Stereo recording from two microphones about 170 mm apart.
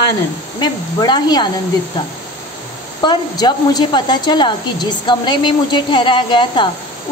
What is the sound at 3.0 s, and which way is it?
A woman's voice, 25° left (ahead or behind).